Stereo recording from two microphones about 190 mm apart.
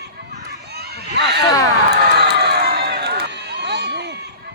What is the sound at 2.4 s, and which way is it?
Run, 60° right (ahead or behind).